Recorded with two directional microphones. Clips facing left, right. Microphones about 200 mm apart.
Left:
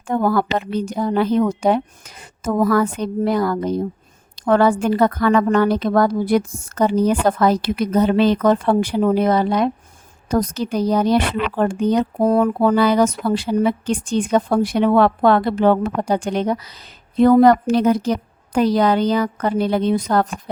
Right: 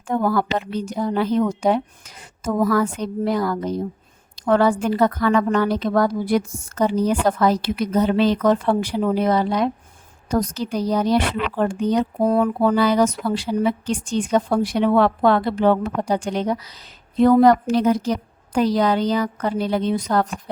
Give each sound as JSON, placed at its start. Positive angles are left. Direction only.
{"t": 0.1, "sound": "speech", "side_deg": 55}